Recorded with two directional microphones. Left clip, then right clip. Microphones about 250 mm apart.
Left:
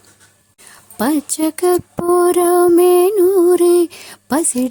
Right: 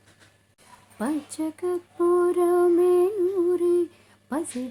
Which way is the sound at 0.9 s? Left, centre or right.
Left.